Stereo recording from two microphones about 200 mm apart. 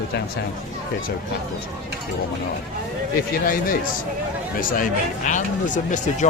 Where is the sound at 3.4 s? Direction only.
45° left (ahead or behind).